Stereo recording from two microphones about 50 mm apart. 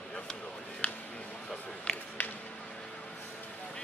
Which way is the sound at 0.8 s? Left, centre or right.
Left.